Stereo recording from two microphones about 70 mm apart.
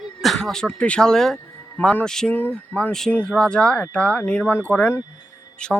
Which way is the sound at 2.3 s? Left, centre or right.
Left.